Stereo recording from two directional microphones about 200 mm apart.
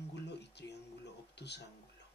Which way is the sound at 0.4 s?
60° left (ahead or behind).